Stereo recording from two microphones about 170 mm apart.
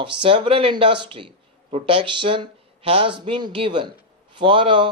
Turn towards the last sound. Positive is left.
turn(degrees=-30)  # may be behind; listen again after turning